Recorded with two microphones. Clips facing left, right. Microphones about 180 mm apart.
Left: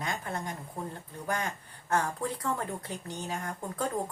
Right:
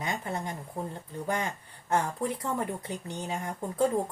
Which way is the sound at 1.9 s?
20° right (ahead or behind).